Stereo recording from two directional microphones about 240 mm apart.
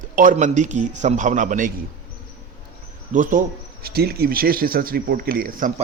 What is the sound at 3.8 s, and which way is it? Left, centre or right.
Speech, right.